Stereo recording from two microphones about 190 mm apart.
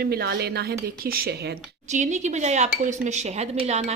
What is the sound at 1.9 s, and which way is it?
Speech, 40° right (ahead or behind).